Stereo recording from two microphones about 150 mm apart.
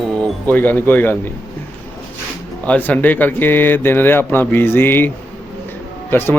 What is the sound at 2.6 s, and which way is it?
Speech, 10° left (ahead or behind).